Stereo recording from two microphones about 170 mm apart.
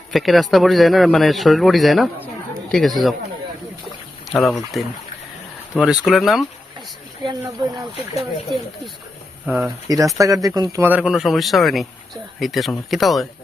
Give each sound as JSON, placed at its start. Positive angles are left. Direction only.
{"t": 0.1, "sound": "a man's voice", "side_deg": 0}
{"t": 4.3, "sound": "a man's voice", "side_deg": 0}
{"t": 7.3, "sound": "speech", "side_deg": -25}
{"t": 9.5, "sound": "a man's voice", "side_deg": 0}
{"t": 10.2, "sound": "speech", "side_deg": -20}
{"t": 10.8, "sound": "a man's voice", "side_deg": -5}